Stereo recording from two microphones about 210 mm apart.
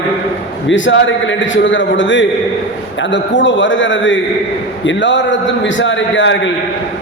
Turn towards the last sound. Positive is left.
turn(degrees=60)  # may be behind; listen again after turning